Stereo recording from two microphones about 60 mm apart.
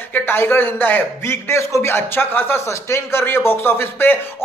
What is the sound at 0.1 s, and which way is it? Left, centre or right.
A man's voice, left.